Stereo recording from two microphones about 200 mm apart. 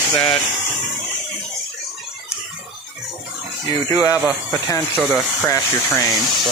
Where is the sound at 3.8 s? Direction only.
15° left (ahead or behind).